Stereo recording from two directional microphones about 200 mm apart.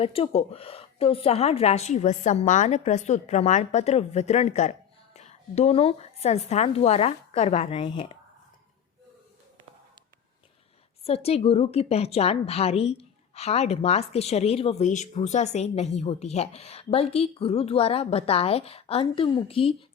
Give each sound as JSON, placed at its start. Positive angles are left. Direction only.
{"t": 0.0, "sound": "a woman's voice", "side_deg": 30}
{"t": 11.0, "sound": "a woman's voice", "side_deg": 30}